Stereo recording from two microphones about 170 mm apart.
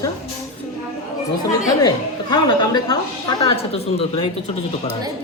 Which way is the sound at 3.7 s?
35° left (ahead or behind).